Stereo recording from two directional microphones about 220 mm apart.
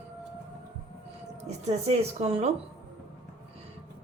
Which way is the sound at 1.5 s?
30° right (ahead or behind).